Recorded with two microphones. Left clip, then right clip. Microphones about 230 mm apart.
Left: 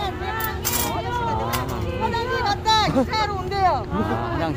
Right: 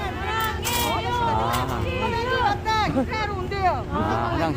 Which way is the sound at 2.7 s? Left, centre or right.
Left.